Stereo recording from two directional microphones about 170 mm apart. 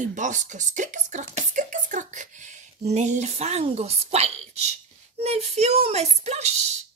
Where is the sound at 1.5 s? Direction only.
50° right (ahead or behind).